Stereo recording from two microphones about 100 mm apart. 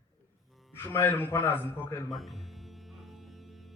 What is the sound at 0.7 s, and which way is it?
A man's voice, 20° left (ahead or behind).